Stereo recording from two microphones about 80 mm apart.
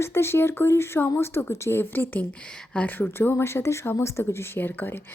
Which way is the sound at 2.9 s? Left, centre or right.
Left.